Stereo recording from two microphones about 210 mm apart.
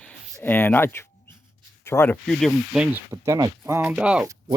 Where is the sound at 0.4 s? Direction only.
10° left (ahead or behind).